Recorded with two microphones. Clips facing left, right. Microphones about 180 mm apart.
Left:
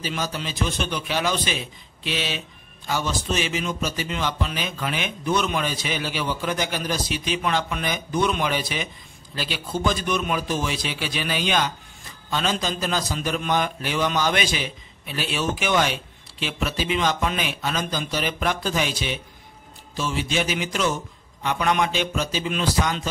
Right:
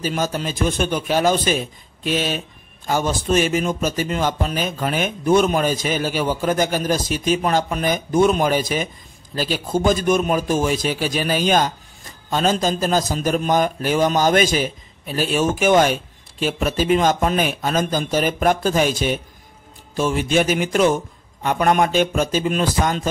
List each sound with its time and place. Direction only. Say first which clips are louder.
0.0 s a man's voice: right 6 dB; 45° right (ahead or behind)